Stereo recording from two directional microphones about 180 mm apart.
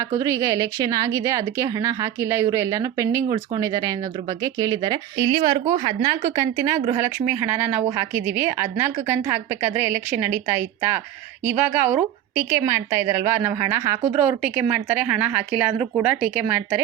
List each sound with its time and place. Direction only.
0.2 s a woman's voice: 20° right (ahead or behind)